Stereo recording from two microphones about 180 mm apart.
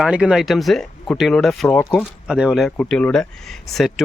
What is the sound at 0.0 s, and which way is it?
Speech, 5° right (ahead or behind).